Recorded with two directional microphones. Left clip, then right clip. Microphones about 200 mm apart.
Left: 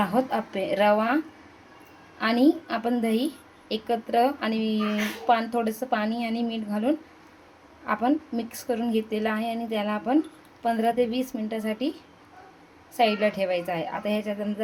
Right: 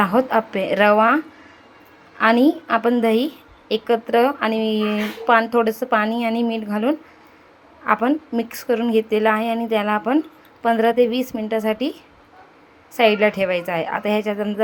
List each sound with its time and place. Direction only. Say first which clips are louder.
0.0 s a woman's voice: right 8 dB; 15° right (ahead or behind)
13.0 s speech: right 7 dB; 15° right (ahead or behind)